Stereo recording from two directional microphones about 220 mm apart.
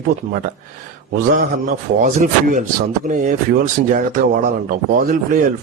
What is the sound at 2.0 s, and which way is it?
Speech, 35° right (ahead or behind).